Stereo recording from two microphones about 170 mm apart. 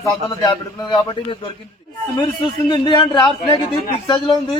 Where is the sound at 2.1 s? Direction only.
30° left (ahead or behind).